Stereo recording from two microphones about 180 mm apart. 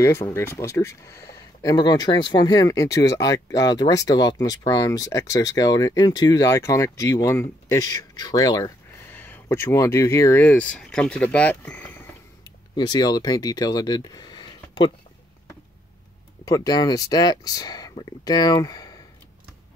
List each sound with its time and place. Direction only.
0.0 s speech: 15° left (ahead or behind)
12.7 s speech: 20° left (ahead or behind)
16.4 s speech: 20° left (ahead or behind)